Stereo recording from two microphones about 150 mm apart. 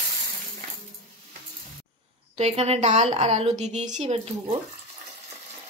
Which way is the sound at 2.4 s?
45° right (ahead or behind).